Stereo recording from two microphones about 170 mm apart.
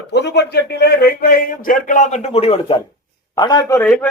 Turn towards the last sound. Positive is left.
turn(degrees=5)  # may be behind; listen again after turning